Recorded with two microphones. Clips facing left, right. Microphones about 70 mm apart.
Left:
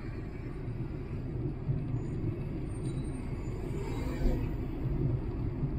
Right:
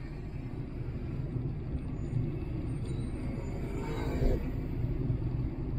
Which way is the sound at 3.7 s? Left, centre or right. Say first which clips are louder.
Right 2 dB; right.